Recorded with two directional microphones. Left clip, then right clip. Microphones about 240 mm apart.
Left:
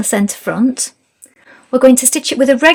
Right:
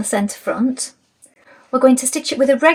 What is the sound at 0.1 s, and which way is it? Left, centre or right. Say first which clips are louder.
Speech: left 2 dB; left.